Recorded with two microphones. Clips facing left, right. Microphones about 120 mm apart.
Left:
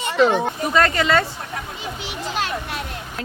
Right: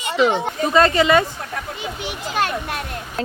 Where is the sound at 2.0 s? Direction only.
50° right (ahead or behind).